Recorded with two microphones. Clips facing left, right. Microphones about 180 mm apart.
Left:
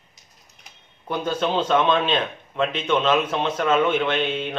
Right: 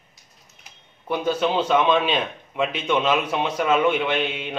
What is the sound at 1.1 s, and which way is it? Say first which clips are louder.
A man's voice: right 2 dB; 10° right (ahead or behind).